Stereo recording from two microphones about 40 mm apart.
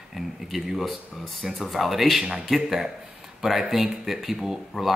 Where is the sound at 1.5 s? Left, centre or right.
Centre.